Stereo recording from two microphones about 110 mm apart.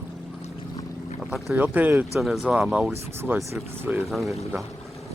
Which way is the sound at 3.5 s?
20° right (ahead or behind).